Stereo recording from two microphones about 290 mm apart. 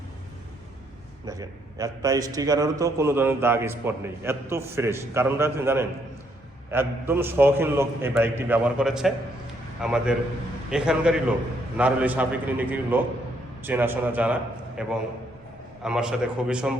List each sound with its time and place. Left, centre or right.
1.2 s a man's voice: centre